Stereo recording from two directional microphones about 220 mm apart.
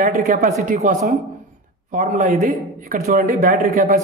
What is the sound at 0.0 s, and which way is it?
Speech, 35° right (ahead or behind).